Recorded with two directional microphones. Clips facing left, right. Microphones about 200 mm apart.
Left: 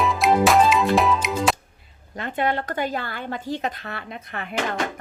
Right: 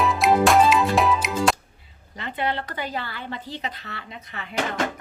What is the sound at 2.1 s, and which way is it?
Speech, 50° left (ahead or behind).